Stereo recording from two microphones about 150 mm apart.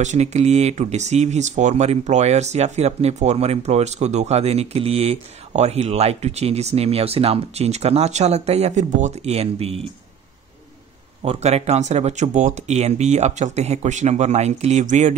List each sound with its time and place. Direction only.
0.0 s speech: 50° right (ahead or behind)
11.2 s speech: 45° right (ahead or behind)